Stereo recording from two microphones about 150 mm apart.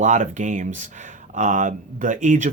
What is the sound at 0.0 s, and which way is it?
Speech, 55° right (ahead or behind).